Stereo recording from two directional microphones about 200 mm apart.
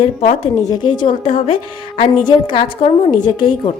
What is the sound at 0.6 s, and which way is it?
A woman's voice, 20° left (ahead or behind).